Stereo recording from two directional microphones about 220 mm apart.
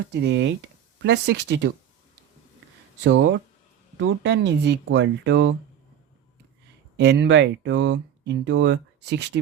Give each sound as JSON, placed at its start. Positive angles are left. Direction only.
{"t": 0.1, "sound": "speech", "side_deg": -50}
{"t": 3.0, "sound": "speech", "side_deg": -55}
{"t": 6.9, "sound": "speech", "side_deg": -50}